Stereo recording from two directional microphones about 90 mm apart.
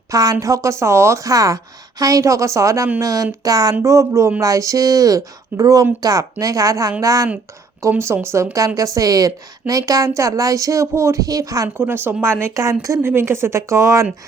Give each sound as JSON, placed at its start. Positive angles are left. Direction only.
{"t": 0.1, "sound": "a woman's voice", "side_deg": -40}
{"t": 11.8, "sound": "speech", "side_deg": -25}
{"t": 12.5, "sound": "a woman's voice", "side_deg": -40}
{"t": 13.0, "sound": "a woman's voice", "side_deg": -25}